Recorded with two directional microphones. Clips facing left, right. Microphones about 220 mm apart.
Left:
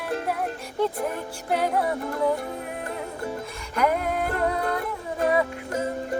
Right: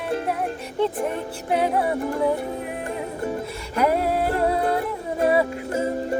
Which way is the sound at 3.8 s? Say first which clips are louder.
Right 3 dB; 35° right (ahead or behind).